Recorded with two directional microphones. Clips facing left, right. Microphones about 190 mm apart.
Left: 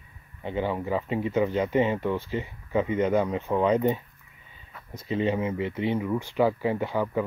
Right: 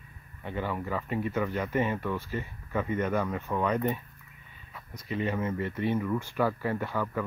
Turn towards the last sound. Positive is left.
turn(degrees=20)  # may be behind; listen again after turning